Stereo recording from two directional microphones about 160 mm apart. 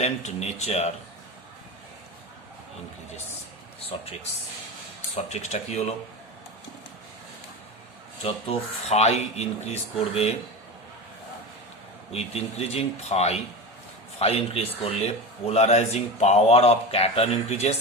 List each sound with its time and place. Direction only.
0.0 s speech: 45° left (ahead or behind)
3.8 s speech: 40° left (ahead or behind)
8.2 s speech: 40° left (ahead or behind)
12.1 s speech: 40° left (ahead or behind)